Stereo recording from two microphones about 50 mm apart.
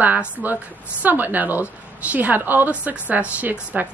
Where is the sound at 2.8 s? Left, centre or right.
Right.